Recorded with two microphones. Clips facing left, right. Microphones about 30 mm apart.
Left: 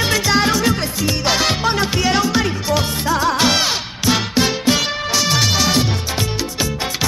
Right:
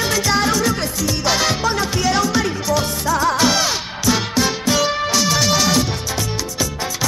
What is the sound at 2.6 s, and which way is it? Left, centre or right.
Music, left.